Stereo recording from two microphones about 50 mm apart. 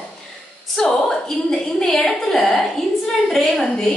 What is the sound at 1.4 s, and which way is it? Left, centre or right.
A woman's voice, centre.